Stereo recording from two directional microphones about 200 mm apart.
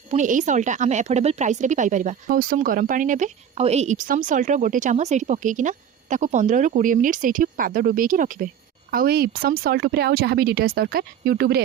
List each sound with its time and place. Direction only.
0.1 s speech: 40° right (ahead or behind)